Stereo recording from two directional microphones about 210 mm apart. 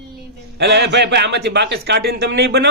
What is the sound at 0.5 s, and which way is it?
A man's voice, 55° right (ahead or behind).